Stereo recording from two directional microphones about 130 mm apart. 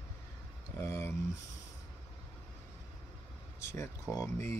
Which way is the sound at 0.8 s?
20° left (ahead or behind).